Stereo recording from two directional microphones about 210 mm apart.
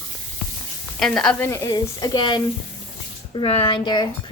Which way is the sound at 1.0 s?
Centre (ahead or behind).